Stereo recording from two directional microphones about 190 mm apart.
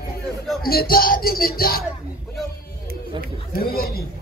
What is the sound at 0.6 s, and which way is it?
A man's voice, 50° left (ahead or behind).